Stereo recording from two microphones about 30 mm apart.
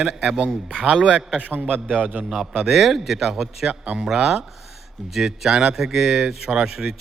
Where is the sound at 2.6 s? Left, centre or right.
Centre.